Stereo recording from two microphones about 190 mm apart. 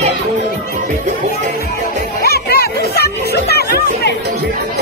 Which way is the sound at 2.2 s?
55° left (ahead or behind).